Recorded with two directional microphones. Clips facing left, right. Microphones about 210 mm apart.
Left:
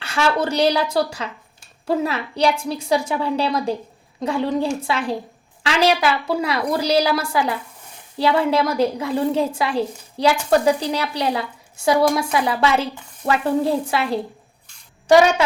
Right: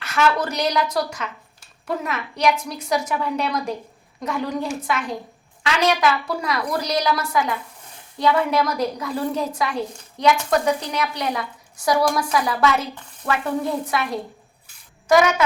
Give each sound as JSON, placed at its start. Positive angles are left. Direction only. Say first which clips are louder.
{"t": 0.0, "sound": "a woman's voice", "louder": "left 1 dB", "side_deg": 30}